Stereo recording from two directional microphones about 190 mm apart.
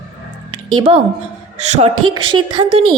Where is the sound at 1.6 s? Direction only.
35° right (ahead or behind).